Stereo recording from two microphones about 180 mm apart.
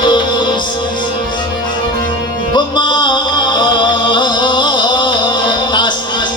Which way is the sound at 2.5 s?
25° left (ahead or behind).